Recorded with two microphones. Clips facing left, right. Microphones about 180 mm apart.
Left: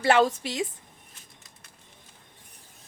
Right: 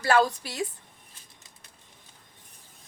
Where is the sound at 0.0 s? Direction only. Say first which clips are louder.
Left 2 dB; 25° left (ahead or behind).